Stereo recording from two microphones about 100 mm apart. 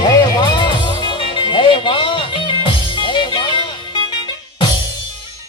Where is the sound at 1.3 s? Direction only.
55° left (ahead or behind).